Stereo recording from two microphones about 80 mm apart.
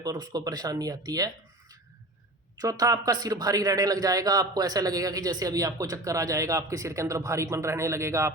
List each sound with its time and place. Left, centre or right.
0.0 s a man's voice: right
2.6 s a man's voice: right